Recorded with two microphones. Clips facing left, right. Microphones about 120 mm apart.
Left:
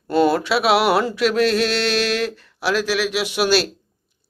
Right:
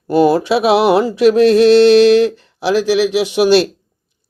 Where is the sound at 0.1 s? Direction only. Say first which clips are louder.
Right 5 dB; 20° right (ahead or behind).